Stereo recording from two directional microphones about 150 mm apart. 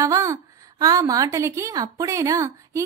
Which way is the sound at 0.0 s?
20° right (ahead or behind).